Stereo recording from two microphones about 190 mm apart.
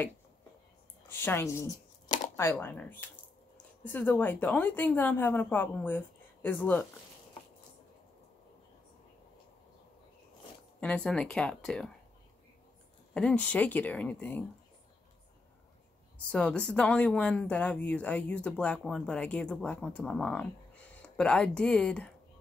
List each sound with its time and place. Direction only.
1.0 s a sound: 10° left (ahead or behind)
2.5 s a woman's voice: 10° left (ahead or behind)
10.8 s speech: 5° left (ahead or behind)
13.1 s a woman's voice: 5° left (ahead or behind)
16.3 s speech: 5° left (ahead or behind)